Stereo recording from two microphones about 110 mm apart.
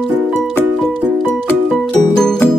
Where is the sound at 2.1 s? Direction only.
5° left (ahead or behind).